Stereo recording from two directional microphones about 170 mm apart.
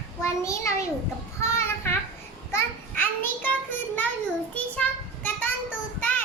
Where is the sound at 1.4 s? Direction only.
15° left (ahead or behind).